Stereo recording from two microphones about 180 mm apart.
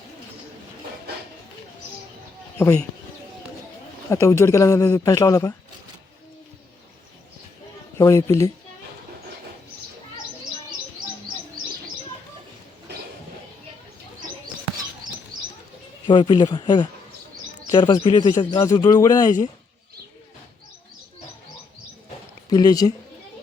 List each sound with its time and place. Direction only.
2.6 s speech: 15° left (ahead or behind)
4.1 s speech: 15° left (ahead or behind)
7.9 s speech: 15° left (ahead or behind)
16.0 s speech: 25° left (ahead or behind)
22.4 s speech: 20° left (ahead or behind)